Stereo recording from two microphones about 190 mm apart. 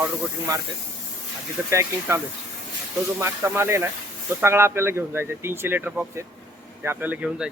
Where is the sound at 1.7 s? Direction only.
15° right (ahead or behind).